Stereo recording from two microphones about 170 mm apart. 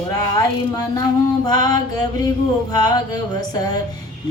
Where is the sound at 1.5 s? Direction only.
25° left (ahead or behind).